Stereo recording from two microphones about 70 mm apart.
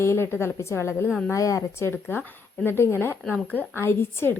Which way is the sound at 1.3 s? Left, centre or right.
Left.